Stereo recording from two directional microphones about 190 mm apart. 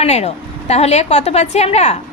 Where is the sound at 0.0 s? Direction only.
35° left (ahead or behind).